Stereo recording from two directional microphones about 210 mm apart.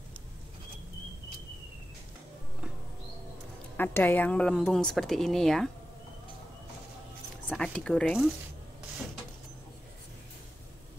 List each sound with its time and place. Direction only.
3.7 s speech: 10° left (ahead or behind)
7.4 s speech: 5° left (ahead or behind)